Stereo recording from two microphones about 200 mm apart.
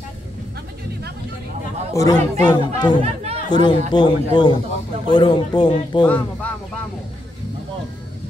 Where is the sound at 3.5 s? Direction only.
25° left (ahead or behind).